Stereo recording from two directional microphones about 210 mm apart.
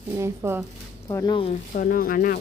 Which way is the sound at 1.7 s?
40° left (ahead or behind).